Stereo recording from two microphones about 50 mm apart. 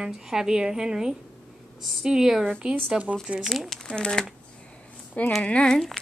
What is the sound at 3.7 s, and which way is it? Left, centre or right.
Speech, centre.